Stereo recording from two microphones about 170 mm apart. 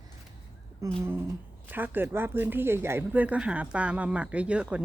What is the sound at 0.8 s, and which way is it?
Speech, 20° right (ahead or behind).